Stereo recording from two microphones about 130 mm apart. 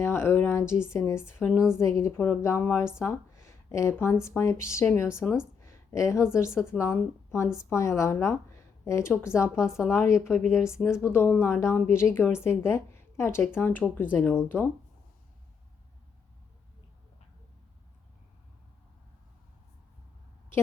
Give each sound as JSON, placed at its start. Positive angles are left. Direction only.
{"t": 0.0, "sound": "a woman's voice", "side_deg": 20}
{"t": 3.0, "sound": "a sound", "side_deg": 20}
{"t": 4.0, "sound": "a woman's voice", "side_deg": 20}
{"t": 5.2, "sound": "speech", "side_deg": -5}
{"t": 5.6, "sound": "a woman's voice", "side_deg": 25}
{"t": 10.4, "sound": "speech", "side_deg": -5}
{"t": 11.0, "sound": "a woman's voice", "side_deg": 20}